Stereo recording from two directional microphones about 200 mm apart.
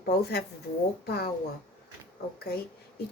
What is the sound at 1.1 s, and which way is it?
Speech, 50° left (ahead or behind).